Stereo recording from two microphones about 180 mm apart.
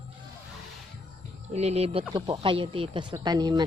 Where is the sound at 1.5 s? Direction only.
35° right (ahead or behind).